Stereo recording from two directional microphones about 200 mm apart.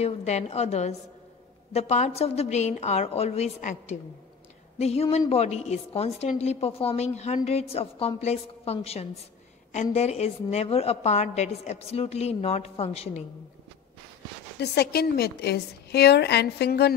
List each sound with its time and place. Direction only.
0.0 s a woman's voice: 35° left (ahead or behind)
14.6 s a woman's voice: 50° left (ahead or behind)